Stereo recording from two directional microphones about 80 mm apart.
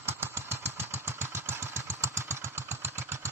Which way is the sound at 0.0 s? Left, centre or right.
Right.